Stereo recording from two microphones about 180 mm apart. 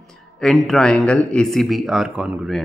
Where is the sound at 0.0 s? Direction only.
5° left (ahead or behind).